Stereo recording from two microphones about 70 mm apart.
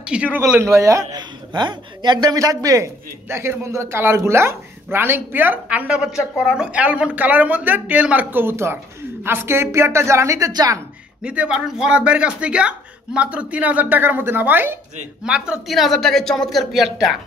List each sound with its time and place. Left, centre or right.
0.0 s speech: centre
0.6 s a man's voice: right
1.1 s a man's voice: right
2.3 s a man's voice: right
10.5 s speech: right
11.2 s a man's voice: centre; by 14.8 s right
15.2 s speech: centre
15.7 s a woman's voice: centre